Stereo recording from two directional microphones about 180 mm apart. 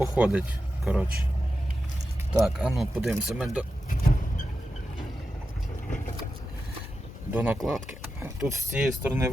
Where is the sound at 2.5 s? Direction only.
Centre (ahead or behind).